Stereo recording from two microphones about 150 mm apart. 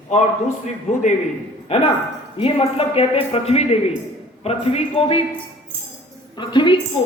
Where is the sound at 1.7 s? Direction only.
40° left (ahead or behind).